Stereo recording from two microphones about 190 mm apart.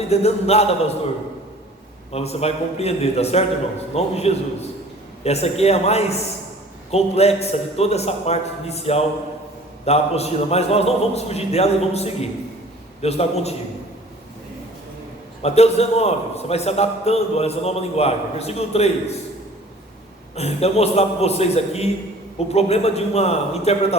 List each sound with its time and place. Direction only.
0.1 s a man's voice: 35° left (ahead or behind)
2.1 s a man's voice: 35° left (ahead or behind)
15.4 s a man's voice: 35° left (ahead or behind)
20.3 s a man's voice: 35° left (ahead or behind)